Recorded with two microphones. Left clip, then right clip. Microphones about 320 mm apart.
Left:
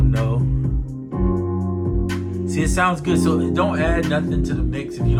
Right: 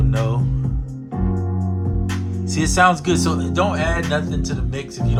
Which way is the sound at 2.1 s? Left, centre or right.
Centre.